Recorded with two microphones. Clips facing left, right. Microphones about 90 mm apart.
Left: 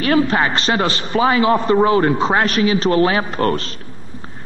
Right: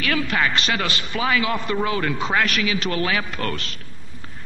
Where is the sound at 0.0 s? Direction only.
35° left (ahead or behind).